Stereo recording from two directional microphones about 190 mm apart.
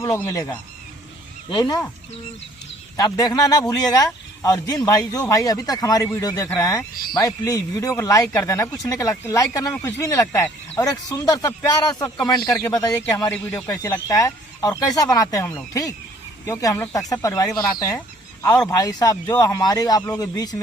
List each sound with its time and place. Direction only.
0.0 s speech: 15° left (ahead or behind)
3.0 s speech: 20° left (ahead or behind)
12.5 s speech: 5° left (ahead or behind)
12.7 s speech: 20° left (ahead or behind)